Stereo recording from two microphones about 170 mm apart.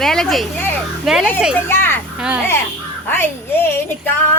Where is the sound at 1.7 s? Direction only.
15° left (ahead or behind).